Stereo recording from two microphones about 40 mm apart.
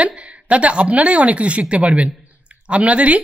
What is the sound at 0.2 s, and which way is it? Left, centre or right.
Speech, right.